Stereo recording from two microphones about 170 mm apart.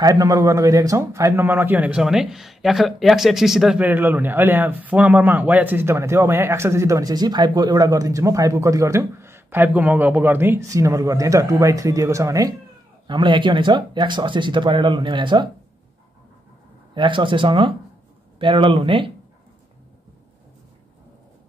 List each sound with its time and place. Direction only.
0.0 s a man's voice: 20° right (ahead or behind)
16.9 s speech: 30° right (ahead or behind)